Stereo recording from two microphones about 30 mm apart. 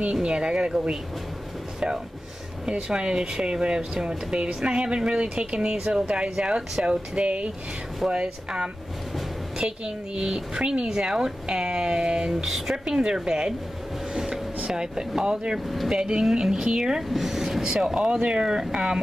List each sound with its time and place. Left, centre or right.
0.1 s speech: right
2.9 s speech: right
8.1 s speech: right
12.4 s speech: centre
12.8 s speech: right
14.1 s a sound: centre
14.7 s speech: right
17.1 s vehicle: centre
17.6 s speech: right